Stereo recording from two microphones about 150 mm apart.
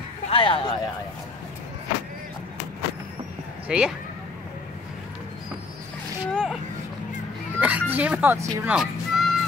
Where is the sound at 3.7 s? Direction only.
5° right (ahead or behind).